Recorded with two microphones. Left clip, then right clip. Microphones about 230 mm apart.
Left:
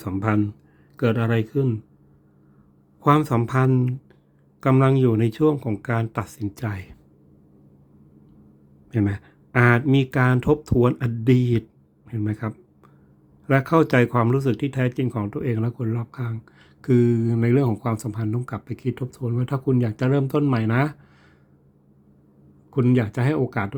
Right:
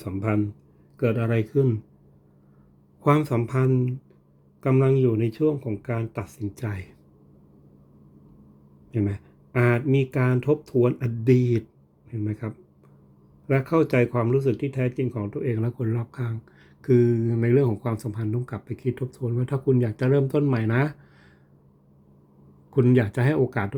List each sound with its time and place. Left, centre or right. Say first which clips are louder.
0.0 s speech: left 3 dB; centre
3.0 s speech: left 3 dB; centre
8.9 s speech: left 3 dB; centre
22.7 s speech: right 1 dB; centre